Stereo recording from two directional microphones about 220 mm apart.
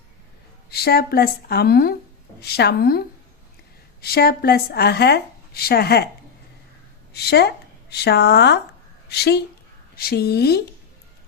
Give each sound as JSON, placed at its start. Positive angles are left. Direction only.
{"t": 0.7, "sound": "speech", "side_deg": 45}
{"t": 4.0, "sound": "speech", "side_deg": 45}
{"t": 7.1, "sound": "a woman's voice", "side_deg": 45}